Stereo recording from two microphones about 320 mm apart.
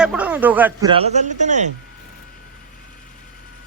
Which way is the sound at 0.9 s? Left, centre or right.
Centre.